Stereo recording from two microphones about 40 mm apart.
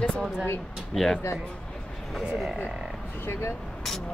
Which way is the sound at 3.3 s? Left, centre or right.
Left.